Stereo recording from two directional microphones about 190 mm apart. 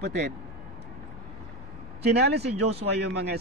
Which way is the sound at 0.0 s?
60° right (ahead or behind).